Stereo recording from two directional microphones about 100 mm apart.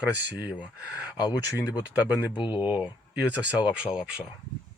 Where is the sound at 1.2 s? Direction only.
40° left (ahead or behind).